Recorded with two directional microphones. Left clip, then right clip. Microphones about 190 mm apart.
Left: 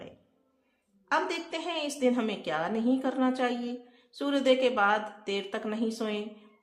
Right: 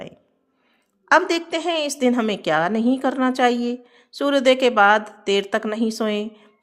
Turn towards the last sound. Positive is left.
turn(degrees=-45)  # may be behind; listen again after turning